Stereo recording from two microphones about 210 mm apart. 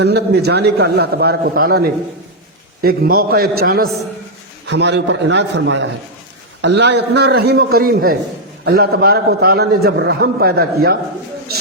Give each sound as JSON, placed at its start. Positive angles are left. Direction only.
{"t": 0.0, "sound": "a man's voice", "side_deg": -50}